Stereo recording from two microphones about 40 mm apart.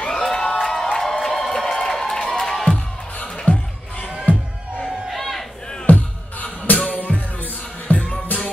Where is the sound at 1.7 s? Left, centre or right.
Centre.